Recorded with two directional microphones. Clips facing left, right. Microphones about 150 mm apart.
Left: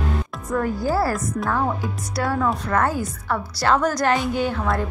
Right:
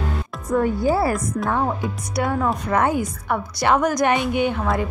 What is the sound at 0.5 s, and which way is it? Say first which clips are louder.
A woman's voice: right 3 dB; 20° right (ahead or behind).